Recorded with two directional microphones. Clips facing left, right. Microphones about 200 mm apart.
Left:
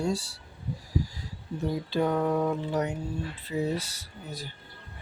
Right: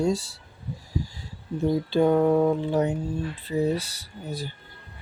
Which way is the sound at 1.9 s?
30° right (ahead or behind).